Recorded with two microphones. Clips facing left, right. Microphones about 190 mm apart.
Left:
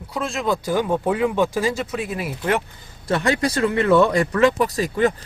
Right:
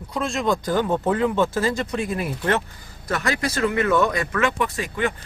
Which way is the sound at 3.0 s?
30° left (ahead or behind).